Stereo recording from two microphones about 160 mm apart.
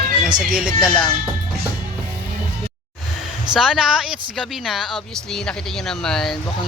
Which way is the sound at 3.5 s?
5° right (ahead or behind).